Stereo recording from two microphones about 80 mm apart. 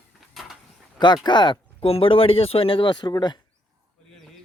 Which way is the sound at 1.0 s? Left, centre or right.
Left.